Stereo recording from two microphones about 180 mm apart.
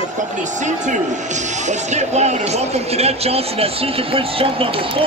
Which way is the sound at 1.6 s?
40° right (ahead or behind).